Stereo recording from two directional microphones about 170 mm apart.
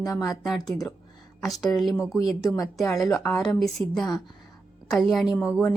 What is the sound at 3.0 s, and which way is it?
Speech, 5° left (ahead or behind).